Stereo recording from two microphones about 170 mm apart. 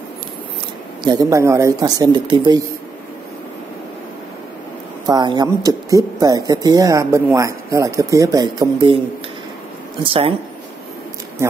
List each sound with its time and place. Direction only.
1.0 s speech: 20° right (ahead or behind)
5.0 s speech: 25° right (ahead or behind)
10.0 s speech: 35° right (ahead or behind)